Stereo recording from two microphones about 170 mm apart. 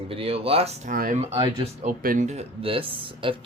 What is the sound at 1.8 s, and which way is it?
Speech, 50° right (ahead or behind).